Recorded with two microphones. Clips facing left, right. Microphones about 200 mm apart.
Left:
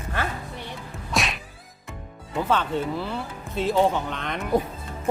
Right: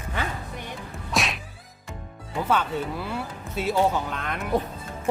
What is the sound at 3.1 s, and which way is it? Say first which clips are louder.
Speech: even; 10° right (ahead or behind).